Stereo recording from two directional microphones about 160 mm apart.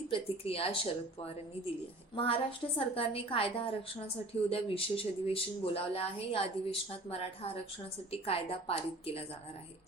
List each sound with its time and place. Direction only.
0.1 s a woman's voice: 35° left (ahead or behind)
2.1 s a woman's voice: 35° left (ahead or behind)